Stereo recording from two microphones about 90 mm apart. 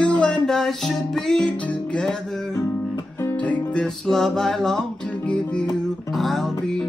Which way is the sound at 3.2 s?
20° left (ahead or behind).